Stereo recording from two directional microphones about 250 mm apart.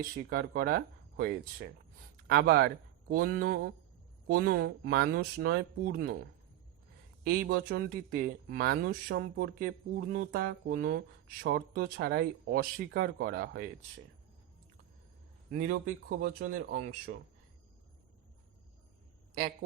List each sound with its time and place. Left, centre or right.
0.3 s speech: right
7.3 s speech: right
16.2 s speech: right